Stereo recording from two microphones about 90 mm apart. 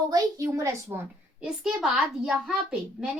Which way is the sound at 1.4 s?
10° right (ahead or behind).